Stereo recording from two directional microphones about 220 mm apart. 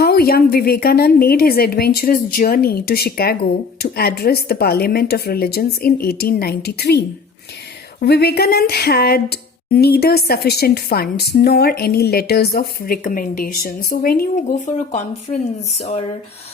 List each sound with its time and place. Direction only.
0.0 s a woman's voice: 45° left (ahead or behind)
8.0 s a woman's voice: 45° left (ahead or behind)